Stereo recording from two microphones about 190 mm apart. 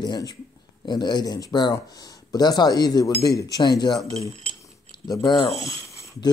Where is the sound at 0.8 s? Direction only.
20° left (ahead or behind).